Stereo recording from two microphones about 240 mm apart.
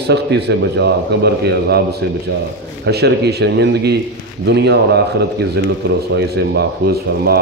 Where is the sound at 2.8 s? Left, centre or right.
Right.